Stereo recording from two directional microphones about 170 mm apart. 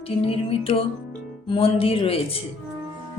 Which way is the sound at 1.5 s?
35° left (ahead or behind).